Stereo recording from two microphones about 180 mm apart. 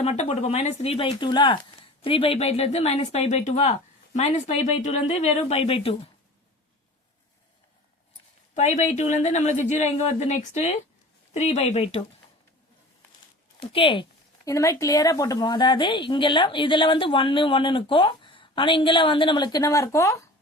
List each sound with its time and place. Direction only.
0.0 s speech: 35° left (ahead or behind)
8.5 s speech: 40° left (ahead or behind)
13.6 s speech: 30° left (ahead or behind)